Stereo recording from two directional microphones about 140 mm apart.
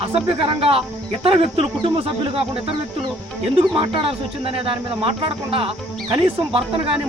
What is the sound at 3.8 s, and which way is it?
Speech, 40° right (ahead or behind).